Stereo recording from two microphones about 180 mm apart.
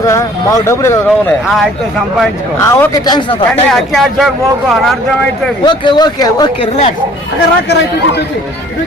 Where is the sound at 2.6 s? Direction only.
15° left (ahead or behind).